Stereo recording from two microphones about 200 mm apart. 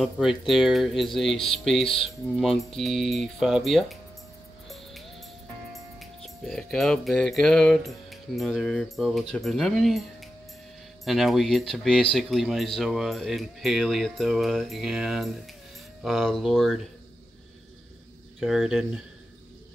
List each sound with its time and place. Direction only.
0.0 s speech: centre (ahead or behind)
4.6 s music: centre (ahead or behind)
9.3 s speech: centre (ahead or behind)
11.1 s speech: centre (ahead or behind)
18.4 s speech: centre (ahead or behind)